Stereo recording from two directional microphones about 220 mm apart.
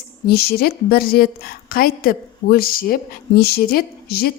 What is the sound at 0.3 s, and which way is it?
A woman's voice, 45° left (ahead or behind).